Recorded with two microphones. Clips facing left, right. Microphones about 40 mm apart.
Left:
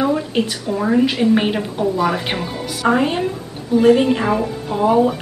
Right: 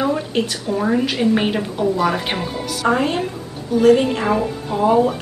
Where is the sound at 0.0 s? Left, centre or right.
Centre.